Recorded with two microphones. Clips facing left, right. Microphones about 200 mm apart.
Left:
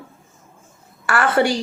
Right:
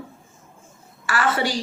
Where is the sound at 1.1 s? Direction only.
55° left (ahead or behind).